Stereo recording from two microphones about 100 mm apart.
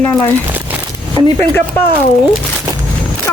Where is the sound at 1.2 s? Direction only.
45° left (ahead or behind).